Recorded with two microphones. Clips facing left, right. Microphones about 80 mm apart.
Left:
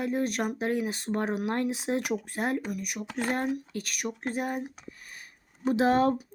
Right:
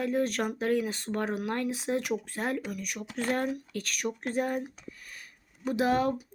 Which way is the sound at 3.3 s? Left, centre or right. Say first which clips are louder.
Even; left.